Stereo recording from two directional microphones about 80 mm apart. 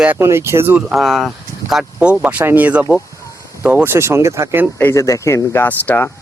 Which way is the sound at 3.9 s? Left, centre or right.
Right.